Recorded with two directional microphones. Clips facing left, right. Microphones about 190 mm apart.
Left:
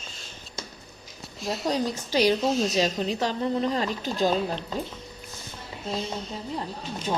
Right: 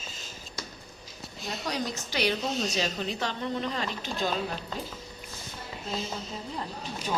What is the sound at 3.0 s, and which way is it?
Speech, 35° left (ahead or behind).